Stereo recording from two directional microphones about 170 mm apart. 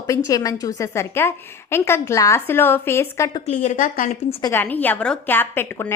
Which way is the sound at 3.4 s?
45° left (ahead or behind).